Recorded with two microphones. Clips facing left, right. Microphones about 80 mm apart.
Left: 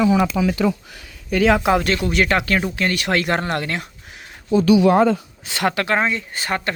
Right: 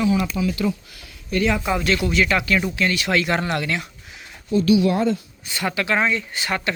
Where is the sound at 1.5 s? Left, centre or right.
Left.